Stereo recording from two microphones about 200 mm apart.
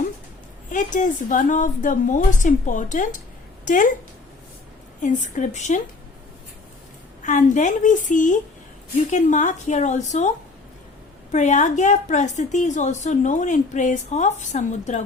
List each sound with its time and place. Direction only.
0.7 s a woman's voice: 40° left (ahead or behind)
5.0 s a woman's voice: 40° left (ahead or behind)
7.2 s a woman's voice: 40° left (ahead or behind)